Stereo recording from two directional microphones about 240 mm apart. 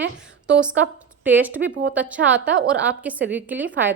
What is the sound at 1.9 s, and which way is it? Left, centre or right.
A woman's voice, centre.